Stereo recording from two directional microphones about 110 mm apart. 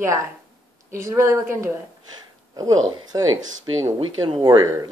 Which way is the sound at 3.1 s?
35° right (ahead or behind).